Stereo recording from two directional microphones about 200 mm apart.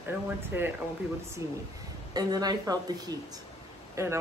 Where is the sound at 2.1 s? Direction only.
20° right (ahead or behind).